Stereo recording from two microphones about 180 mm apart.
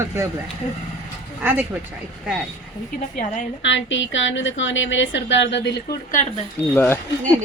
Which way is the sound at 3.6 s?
90° left.